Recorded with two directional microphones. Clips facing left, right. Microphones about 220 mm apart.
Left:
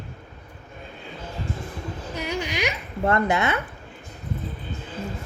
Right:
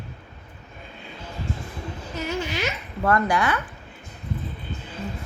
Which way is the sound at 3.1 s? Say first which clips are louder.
Even; 25° left (ahead or behind).